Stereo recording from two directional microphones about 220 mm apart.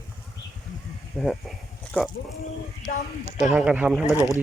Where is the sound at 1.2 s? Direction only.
Centre (ahead or behind).